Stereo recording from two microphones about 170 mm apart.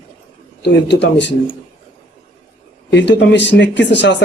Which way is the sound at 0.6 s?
85° left.